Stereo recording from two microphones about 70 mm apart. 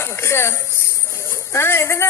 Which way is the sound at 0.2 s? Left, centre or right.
Left.